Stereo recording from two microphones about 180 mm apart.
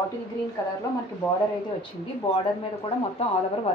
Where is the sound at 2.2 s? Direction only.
30° left (ahead or behind).